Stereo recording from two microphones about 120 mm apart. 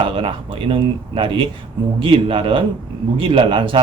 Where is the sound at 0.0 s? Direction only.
45° right (ahead or behind).